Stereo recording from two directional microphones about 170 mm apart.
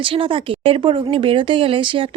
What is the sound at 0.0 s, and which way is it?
Speech, 30° right (ahead or behind).